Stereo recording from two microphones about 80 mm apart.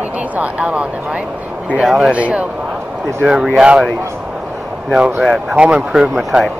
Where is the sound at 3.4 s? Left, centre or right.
Centre.